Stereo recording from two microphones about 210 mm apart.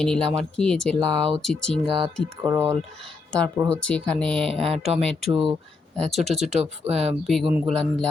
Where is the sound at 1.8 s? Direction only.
25° right (ahead or behind).